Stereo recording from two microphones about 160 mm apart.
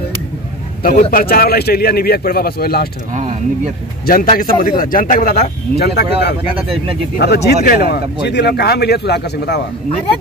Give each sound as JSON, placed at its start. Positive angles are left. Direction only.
{"t": 1.1, "sound": "speech", "side_deg": 65}
{"t": 3.1, "sound": "speech", "side_deg": -50}
{"t": 4.0, "sound": "a man's voice", "side_deg": 65}
{"t": 7.2, "sound": "speech", "side_deg": 90}
{"t": 7.6, "sound": "speech", "side_deg": 75}